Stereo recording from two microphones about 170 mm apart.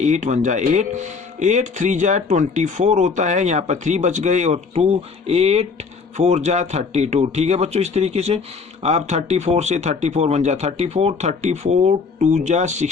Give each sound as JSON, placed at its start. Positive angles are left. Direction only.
{"t": 0.0, "sound": "speech", "side_deg": -45}